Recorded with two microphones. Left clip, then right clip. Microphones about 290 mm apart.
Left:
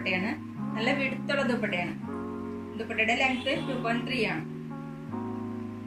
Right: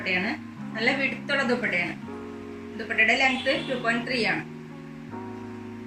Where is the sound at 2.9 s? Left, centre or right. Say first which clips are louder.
Right 5 dB; centre.